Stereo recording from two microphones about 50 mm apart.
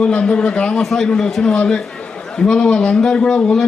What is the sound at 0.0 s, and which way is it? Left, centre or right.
A man's voice, left.